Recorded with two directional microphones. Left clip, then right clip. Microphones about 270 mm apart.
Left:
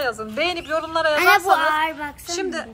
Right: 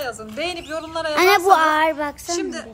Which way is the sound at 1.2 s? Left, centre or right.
Right.